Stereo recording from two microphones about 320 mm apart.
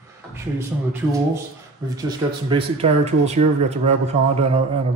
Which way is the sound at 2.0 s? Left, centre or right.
Centre.